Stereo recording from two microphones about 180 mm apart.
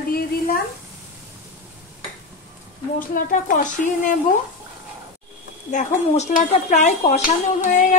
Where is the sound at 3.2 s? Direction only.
45° left (ahead or behind).